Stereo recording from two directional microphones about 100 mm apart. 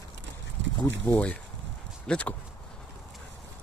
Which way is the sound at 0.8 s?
20° left (ahead or behind).